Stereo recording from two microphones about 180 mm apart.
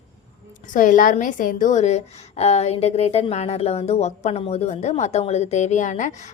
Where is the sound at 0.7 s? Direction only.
50° left (ahead or behind).